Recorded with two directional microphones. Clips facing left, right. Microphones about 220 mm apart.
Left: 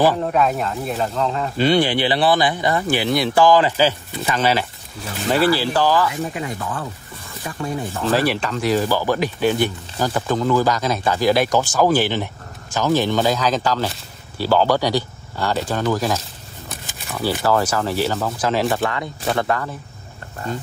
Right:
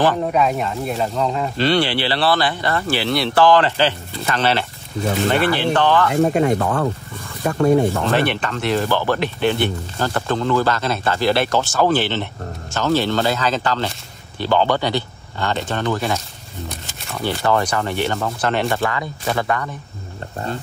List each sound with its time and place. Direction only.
0.2 s speech: centre (ahead or behind)
1.6 s speech: 15° left (ahead or behind)
5.4 s speech: 35° left (ahead or behind)
5.7 s speech: 5° left (ahead or behind)
6.1 s speech: 50° right (ahead or behind)
8.3 s speech: centre (ahead or behind)